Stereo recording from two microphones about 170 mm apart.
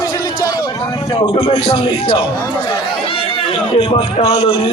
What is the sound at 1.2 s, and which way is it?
A man's voice, 30° left (ahead or behind).